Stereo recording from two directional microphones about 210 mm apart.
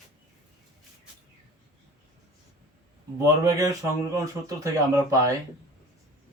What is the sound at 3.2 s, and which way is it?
Speech, 15° right (ahead or behind).